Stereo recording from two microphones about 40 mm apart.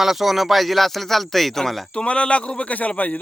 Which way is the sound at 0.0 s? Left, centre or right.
Centre.